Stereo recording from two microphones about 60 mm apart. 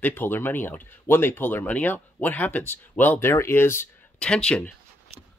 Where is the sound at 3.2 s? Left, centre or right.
Left.